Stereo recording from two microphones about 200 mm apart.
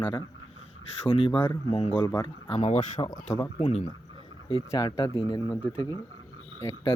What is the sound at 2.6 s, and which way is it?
Speech, 35° left (ahead or behind).